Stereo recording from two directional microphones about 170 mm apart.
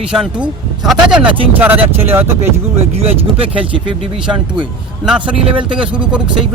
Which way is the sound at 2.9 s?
35° right (ahead or behind).